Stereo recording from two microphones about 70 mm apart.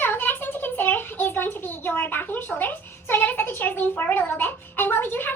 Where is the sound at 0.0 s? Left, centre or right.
Left.